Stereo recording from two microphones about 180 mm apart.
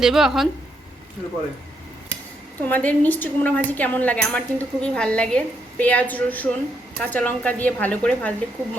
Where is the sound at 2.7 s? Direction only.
10° left (ahead or behind).